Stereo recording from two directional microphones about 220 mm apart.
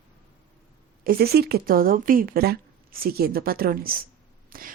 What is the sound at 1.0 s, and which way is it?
A woman's voice, 45° right (ahead or behind).